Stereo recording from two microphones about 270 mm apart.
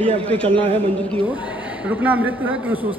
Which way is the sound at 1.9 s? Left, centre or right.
Centre.